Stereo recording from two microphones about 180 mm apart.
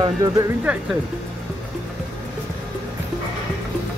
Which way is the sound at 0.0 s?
20° right (ahead or behind).